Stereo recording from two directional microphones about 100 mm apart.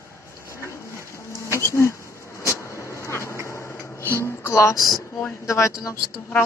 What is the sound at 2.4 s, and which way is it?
Vehicle, 30° left (ahead or behind).